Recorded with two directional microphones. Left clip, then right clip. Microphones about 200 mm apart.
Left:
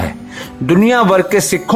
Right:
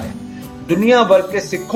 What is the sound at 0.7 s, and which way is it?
Speech, 50° left (ahead or behind).